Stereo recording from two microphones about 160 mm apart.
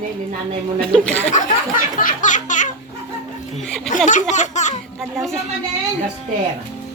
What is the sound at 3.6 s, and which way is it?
Music, 5° left (ahead or behind).